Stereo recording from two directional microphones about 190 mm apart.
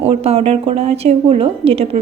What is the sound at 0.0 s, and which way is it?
A woman's voice, 35° right (ahead or behind).